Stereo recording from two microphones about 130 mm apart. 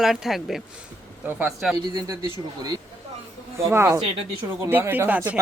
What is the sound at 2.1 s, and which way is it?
Speech, 25° right (ahead or behind).